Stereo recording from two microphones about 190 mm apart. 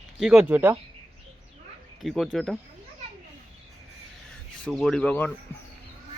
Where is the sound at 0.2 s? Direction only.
5° right (ahead or behind).